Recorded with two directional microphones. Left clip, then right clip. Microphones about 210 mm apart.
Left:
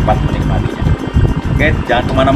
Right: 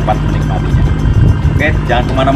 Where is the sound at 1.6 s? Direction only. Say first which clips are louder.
Even; 15° left (ahead or behind).